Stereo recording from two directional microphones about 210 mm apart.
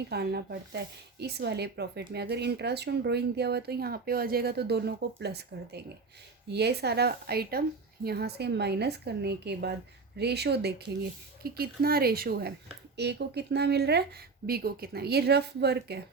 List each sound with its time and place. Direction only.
0.1 s speech: 50° right (ahead or behind)